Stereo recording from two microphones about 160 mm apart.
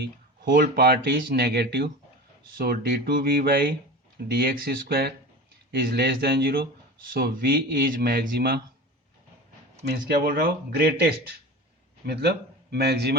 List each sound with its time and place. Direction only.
0.5 s speech: 65° right (ahead or behind); by 1.9 s 90° right
2.6 s speech: 65° right (ahead or behind); by 8.6 s 80° right
10.2 s speech: 75° right (ahead or behind)
12.0 s speech: 90° right